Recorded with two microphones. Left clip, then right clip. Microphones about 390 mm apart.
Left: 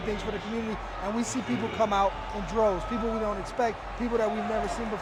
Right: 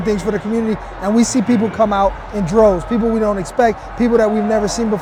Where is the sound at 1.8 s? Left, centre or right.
Right.